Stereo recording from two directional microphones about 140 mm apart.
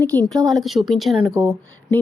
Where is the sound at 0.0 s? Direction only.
10° left (ahead or behind).